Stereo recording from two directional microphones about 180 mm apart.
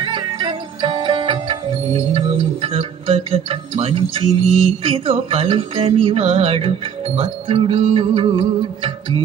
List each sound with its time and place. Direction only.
0.0 s music: 25° right (ahead or behind)